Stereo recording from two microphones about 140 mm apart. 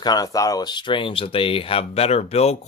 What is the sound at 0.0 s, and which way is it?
Speech, 25° left (ahead or behind).